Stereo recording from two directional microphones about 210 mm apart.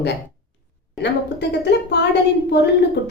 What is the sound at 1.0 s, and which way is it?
A woman's voice, 55° left (ahead or behind).